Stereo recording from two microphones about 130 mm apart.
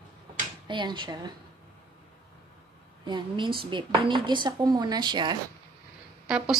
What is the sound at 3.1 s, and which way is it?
Speech, 40° right (ahead or behind).